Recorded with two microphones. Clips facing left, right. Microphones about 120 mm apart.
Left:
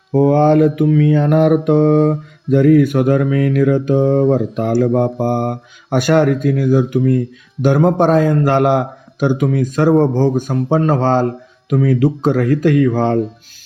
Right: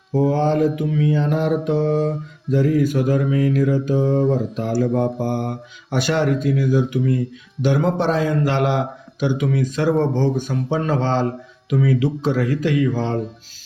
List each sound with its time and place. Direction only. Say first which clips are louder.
0.1 s mantra: left 7 dB; 60° left (ahead or behind)
7.6 s a man's voice: left 6 dB; 50° left (ahead or behind)